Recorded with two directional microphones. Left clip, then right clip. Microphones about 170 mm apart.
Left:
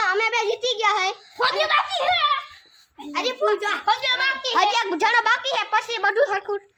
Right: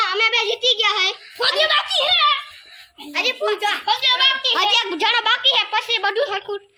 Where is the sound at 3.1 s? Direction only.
75° left (ahead or behind).